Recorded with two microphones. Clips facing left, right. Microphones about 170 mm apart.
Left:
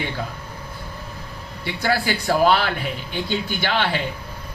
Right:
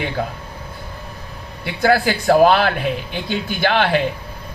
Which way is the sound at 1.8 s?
50° right (ahead or behind).